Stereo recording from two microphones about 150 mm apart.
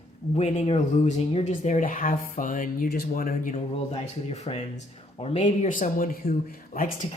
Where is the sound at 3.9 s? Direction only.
45° left (ahead or behind); by 6.9 s 70° left (ahead or behind).